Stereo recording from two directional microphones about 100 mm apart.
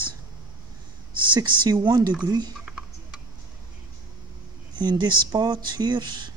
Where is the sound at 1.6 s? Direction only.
45° right (ahead or behind).